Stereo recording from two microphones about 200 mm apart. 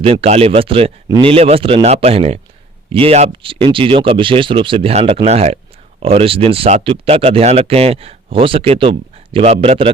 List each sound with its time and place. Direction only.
0.0 s speech: 30° right (ahead or behind)